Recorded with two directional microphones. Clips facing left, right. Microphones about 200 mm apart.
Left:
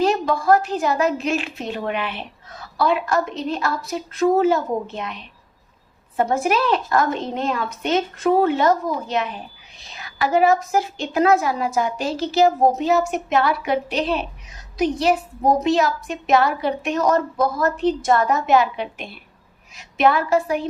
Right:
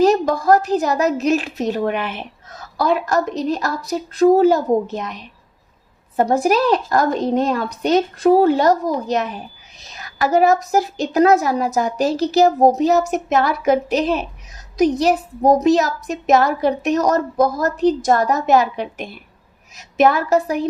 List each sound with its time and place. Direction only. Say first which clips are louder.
0.0 s a woman's voice: right 5 dB; 40° right (ahead or behind)